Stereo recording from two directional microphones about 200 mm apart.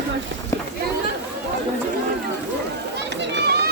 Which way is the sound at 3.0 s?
55° right (ahead or behind).